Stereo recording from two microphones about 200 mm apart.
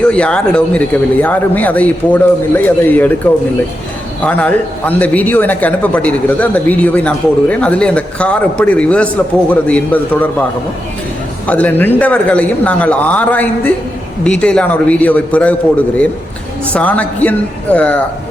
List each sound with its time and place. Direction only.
0.0 s a man's voice: 5° left (ahead or behind)
4.2 s a man's voice: 5° left (ahead or behind)
11.4 s a man's voice: 10° left (ahead or behind)
16.7 s a man's voice: 5° left (ahead or behind)